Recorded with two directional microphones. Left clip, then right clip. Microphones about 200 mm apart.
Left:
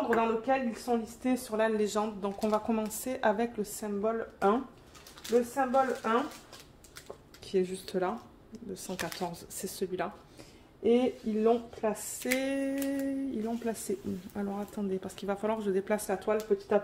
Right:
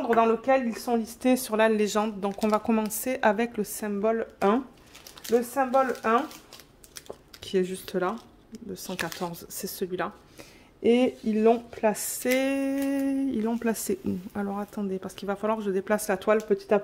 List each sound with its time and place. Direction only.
0.1 s speech: 65° right (ahead or behind)
7.4 s speech: 40° right (ahead or behind)
8.9 s speech: 20° right (ahead or behind)
10.8 s speech: 55° right (ahead or behind)
12.3 s speech: 40° right (ahead or behind)
14.3 s speech: 30° right (ahead or behind)
16.1 s speech: 50° right (ahead or behind)
16.5 s speech: 70° right (ahead or behind)